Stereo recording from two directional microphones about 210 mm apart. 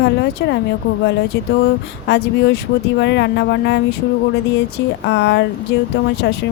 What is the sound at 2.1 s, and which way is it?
A woman's voice, 55° left (ahead or behind).